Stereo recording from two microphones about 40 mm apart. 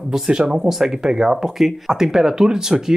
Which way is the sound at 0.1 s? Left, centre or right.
Centre.